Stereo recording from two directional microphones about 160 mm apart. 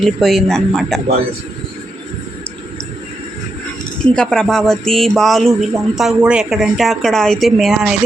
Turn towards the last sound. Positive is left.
turn(degrees=0)  # may be behind; listen again after turning